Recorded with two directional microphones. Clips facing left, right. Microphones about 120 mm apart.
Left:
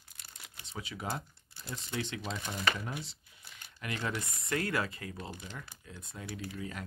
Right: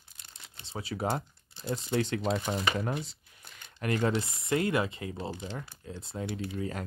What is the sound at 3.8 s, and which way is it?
Speech, 45° right (ahead or behind).